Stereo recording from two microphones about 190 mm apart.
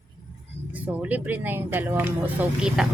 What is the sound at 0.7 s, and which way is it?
Speech, 10° right (ahead or behind).